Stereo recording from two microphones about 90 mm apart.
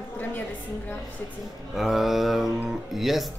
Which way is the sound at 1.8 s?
5° right (ahead or behind).